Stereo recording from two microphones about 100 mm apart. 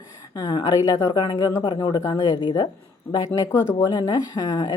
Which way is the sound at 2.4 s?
50° left (ahead or behind).